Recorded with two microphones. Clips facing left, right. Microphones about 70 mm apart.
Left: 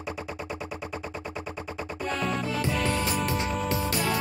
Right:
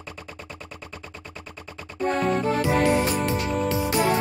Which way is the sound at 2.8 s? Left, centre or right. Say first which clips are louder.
Right 6 dB; right.